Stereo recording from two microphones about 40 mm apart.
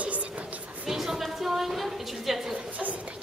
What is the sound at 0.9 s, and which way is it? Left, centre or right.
A woman's voice, centre.